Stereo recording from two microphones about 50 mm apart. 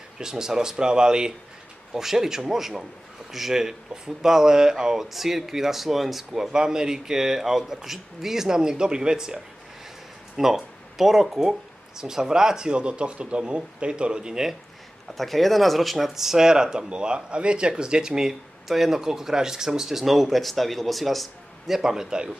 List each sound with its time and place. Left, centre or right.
0.2 s a man's voice: centre
15.1 s a man's voice: centre